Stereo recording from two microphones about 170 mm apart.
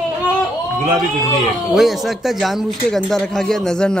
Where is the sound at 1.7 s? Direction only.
Centre (ahead or behind).